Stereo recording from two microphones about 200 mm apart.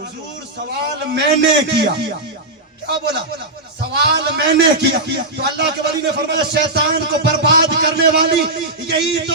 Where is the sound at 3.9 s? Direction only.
55° right (ahead or behind).